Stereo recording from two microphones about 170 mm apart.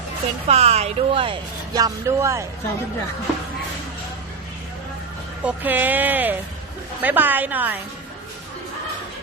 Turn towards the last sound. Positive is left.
turn(degrees=-10)  # may be behind; listen again after turning